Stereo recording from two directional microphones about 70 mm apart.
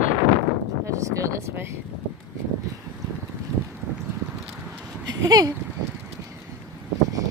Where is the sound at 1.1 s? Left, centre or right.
Right.